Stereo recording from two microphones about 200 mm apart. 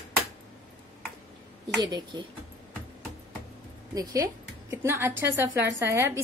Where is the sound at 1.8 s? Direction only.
20° right (ahead or behind).